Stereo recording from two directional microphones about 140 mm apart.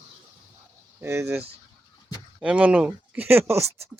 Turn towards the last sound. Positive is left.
turn(degrees=-15)  # may be behind; listen again after turning